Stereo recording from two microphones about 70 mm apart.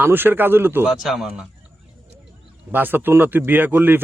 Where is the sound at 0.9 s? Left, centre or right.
Centre.